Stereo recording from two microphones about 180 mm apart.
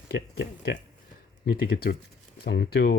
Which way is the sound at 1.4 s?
60° left (ahead or behind).